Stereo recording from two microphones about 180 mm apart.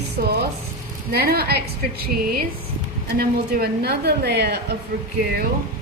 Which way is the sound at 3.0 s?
60° right (ahead or behind).